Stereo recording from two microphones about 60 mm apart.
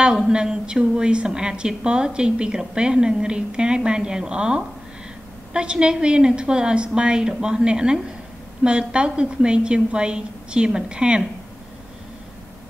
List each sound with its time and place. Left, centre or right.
0.0 s a woman's voice: centre